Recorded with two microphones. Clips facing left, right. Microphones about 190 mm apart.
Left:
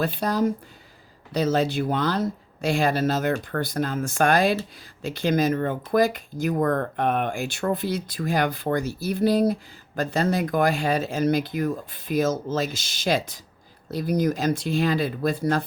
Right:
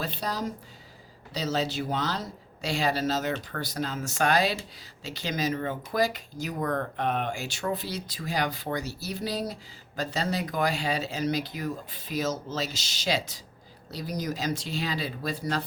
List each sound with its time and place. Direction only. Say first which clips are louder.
0.0 s speech: left 9 dB; 55° left (ahead or behind)